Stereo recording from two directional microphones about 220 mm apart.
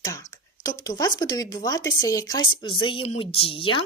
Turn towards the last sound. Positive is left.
turn(degrees=25)  # may be behind; listen again after turning